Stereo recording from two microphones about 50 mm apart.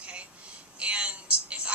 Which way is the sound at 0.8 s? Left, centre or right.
Right.